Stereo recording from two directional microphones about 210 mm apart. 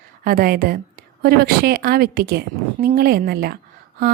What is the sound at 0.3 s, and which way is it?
A woman's voice, 45° right (ahead or behind).